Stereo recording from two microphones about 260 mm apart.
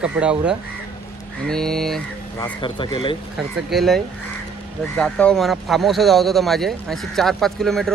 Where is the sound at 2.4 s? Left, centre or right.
Centre.